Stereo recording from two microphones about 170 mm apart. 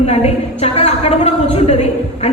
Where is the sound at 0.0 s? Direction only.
35° left (ahead or behind).